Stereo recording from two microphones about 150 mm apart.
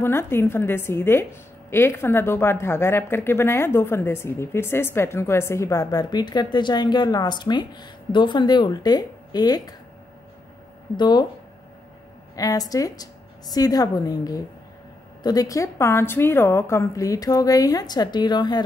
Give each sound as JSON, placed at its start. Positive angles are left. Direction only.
{"t": 0.0, "sound": "speech", "side_deg": 15}
{"t": 11.0, "sound": "a woman's voice", "side_deg": 30}
{"t": 12.4, "sound": "a woman's voice", "side_deg": 25}